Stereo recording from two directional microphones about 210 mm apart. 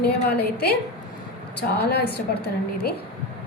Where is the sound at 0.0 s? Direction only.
50° left (ahead or behind).